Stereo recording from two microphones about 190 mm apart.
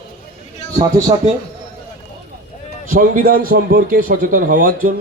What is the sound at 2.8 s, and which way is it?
A man's voice, 45° right (ahead or behind).